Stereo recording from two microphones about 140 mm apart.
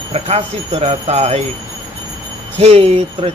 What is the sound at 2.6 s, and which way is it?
Speech, 45° right (ahead or behind).